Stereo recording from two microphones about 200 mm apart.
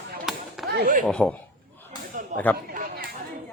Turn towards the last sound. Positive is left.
turn(degrees=-45)  # may be behind; listen again after turning